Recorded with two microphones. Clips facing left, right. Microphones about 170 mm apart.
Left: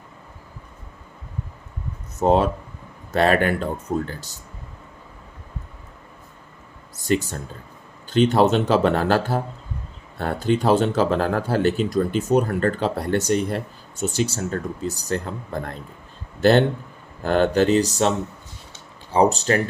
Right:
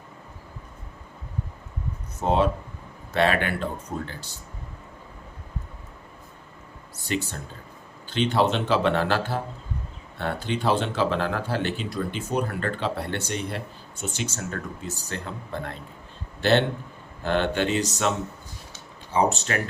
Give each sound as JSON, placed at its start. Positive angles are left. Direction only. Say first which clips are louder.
{"t": 2.2, "sound": "speech", "louder": "left 4 dB", "side_deg": 45}
{"t": 7.1, "sound": "speech", "louder": "left 7 dB", "side_deg": 45}
{"t": 19.1, "sound": "speech", "louder": "left 5 dB", "side_deg": 35}